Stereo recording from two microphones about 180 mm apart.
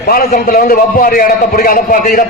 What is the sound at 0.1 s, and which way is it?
A man's voice, 55° left (ahead or behind).